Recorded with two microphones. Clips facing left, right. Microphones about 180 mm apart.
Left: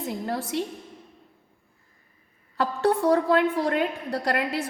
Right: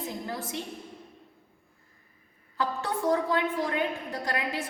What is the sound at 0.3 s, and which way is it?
Speech, 65° left (ahead or behind).